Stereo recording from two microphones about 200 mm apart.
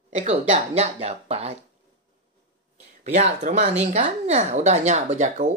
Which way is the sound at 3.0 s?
35° right (ahead or behind).